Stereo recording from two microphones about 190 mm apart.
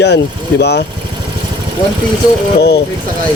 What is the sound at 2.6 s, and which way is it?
Speech, 60° left (ahead or behind).